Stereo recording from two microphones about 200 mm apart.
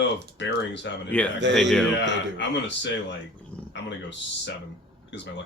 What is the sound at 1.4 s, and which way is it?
Speech, 60° right (ahead or behind).